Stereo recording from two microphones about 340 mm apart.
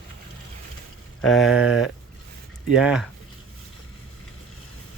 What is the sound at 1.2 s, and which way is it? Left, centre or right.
Speech, centre.